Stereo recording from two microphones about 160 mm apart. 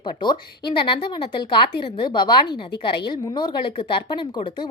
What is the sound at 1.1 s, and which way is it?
Speech, 30° left (ahead or behind).